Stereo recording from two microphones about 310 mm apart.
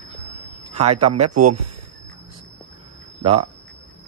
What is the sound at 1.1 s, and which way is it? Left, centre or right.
Speech, right.